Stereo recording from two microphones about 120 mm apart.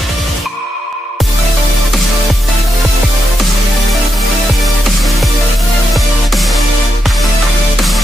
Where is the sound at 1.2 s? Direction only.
Centre (ahead or behind).